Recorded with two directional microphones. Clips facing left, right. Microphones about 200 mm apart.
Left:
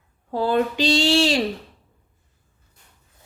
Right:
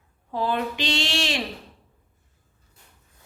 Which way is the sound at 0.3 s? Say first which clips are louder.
Left 5 dB; 35° left (ahead or behind).